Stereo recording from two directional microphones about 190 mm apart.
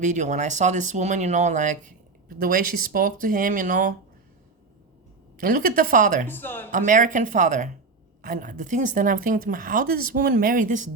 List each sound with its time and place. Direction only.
0.0 s speech: 40° right (ahead or behind)
5.4 s speech: 50° right (ahead or behind)
6.2 s speech: 10° left (ahead or behind)
6.7 s speech: 45° right (ahead or behind)